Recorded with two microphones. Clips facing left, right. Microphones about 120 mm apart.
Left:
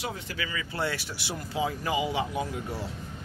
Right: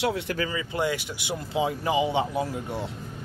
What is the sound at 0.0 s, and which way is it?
Speech, 80° right.